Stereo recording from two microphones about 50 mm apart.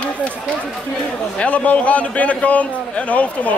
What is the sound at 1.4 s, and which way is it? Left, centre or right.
A man's voice, left.